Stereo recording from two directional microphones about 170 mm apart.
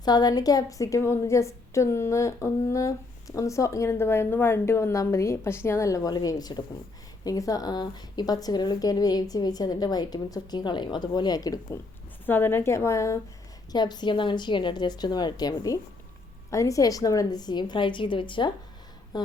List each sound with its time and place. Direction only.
0.0 s a woman's voice: 25° left (ahead or behind)